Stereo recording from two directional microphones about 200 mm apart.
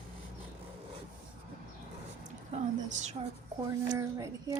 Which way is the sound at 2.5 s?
35° right (ahead or behind).